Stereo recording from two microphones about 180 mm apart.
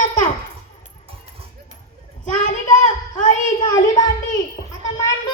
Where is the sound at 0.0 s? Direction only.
45° left (ahead or behind).